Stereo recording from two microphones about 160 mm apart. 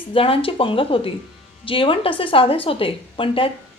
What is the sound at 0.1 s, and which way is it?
A woman's voice, 35° left (ahead or behind).